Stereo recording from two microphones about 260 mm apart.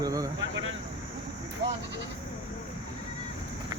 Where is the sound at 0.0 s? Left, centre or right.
Centre.